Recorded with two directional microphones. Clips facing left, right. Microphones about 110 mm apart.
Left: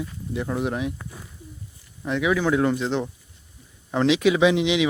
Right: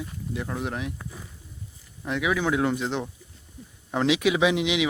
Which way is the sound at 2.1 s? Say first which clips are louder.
Left 3 dB; centre (ahead or behind).